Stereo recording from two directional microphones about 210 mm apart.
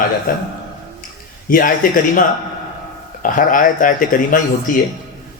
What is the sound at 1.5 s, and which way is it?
Speech, 40° left (ahead or behind).